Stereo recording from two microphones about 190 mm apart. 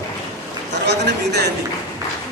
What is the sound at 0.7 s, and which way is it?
Speech, 60° right (ahead or behind).